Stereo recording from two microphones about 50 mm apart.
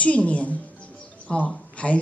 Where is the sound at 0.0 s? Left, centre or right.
Left.